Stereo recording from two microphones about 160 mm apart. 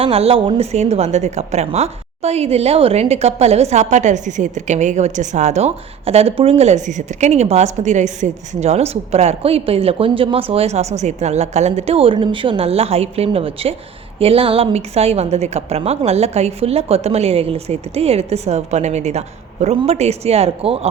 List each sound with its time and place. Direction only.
0.0 s a woman's voice: 35° right (ahead or behind)